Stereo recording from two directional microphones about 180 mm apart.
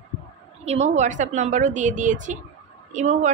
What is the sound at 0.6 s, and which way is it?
A woman's voice, 40° right (ahead or behind).